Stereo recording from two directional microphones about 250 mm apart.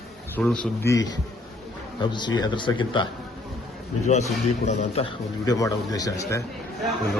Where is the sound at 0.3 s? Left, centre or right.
Centre.